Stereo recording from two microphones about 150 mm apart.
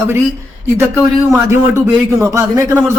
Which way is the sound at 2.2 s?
15° right (ahead or behind).